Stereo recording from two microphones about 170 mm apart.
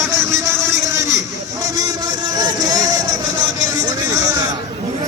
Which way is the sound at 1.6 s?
20° right (ahead or behind).